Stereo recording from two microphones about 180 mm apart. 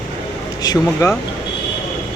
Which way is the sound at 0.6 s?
20° left (ahead or behind).